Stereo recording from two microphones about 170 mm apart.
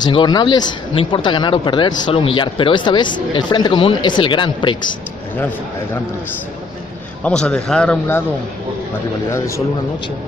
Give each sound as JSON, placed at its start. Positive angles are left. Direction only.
{"t": 0.0, "sound": "speech", "side_deg": 25}
{"t": 7.2, "sound": "speech", "side_deg": 5}